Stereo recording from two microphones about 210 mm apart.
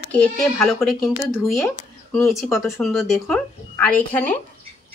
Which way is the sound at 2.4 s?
Centre (ahead or behind).